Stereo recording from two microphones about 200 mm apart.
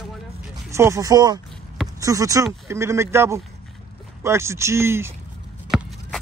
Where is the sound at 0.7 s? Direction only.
15° right (ahead or behind).